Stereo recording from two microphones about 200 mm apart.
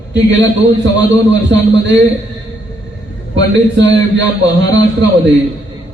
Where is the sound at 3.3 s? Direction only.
65° right (ahead or behind).